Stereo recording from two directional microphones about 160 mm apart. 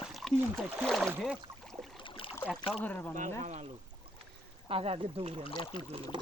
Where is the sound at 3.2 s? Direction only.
45° right (ahead or behind).